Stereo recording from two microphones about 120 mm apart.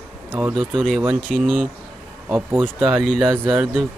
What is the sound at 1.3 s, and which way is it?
Speech, 5° left (ahead or behind).